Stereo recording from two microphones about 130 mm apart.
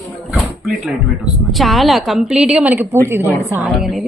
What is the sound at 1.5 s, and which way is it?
A woman's voice, centre (ahead or behind).